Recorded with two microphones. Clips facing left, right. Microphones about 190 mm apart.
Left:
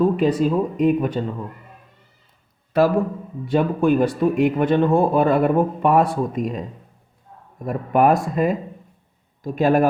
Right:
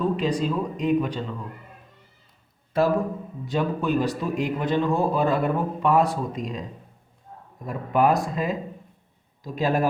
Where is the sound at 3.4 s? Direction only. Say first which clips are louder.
Left 7 dB; 55° left (ahead or behind).